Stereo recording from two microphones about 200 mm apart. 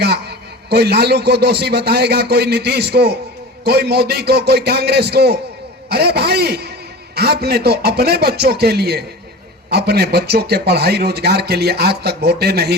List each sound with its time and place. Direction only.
0.0 s a man's voice: 55° right (ahead or behind)